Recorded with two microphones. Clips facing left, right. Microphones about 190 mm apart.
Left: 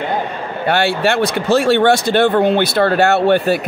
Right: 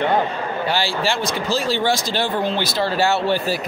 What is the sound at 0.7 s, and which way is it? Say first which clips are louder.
Speech: left 8 dB; 60° left (ahead or behind).